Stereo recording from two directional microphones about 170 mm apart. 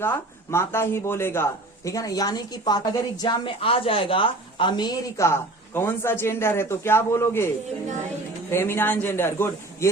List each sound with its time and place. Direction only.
0.0 s speech: 15° left (ahead or behind)